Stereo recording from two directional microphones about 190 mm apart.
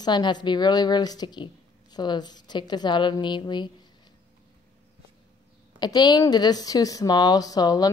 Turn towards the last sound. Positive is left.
turn(degrees=20)  # may be behind; listen again after turning